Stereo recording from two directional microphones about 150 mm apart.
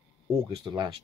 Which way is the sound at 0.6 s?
30° right (ahead or behind).